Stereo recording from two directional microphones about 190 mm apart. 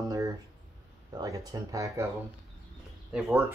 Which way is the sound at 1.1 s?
20° right (ahead or behind).